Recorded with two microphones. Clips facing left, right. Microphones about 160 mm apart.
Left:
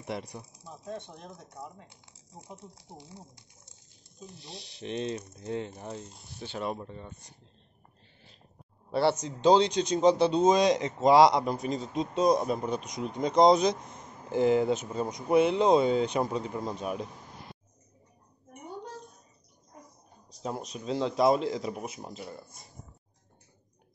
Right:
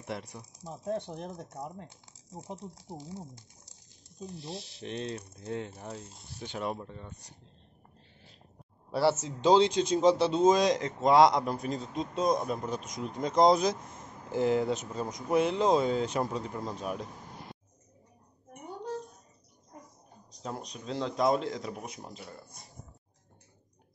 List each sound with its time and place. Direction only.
0.0 s a man's voice: centre (ahead or behind)
0.6 s speech: 40° right (ahead or behind)
4.4 s a man's voice: centre (ahead or behind)
6.8 s speech: 10° left (ahead or behind)
8.9 s a man's voice: 5° right (ahead or behind)
20.4 s a man's voice: 5° left (ahead or behind)